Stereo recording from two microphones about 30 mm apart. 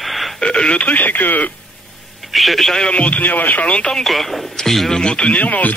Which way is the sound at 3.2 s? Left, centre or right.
Left.